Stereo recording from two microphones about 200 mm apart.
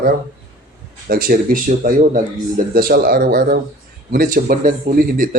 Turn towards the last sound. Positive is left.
turn(degrees=-45)  # may be behind; listen again after turning